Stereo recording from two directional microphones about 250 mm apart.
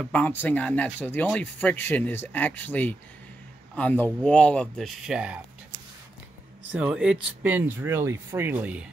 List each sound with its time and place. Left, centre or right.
0.0 s speech: centre
6.7 s speech: centre